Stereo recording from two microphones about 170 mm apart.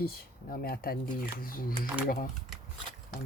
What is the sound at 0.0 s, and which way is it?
Speech, 60° left (ahead or behind).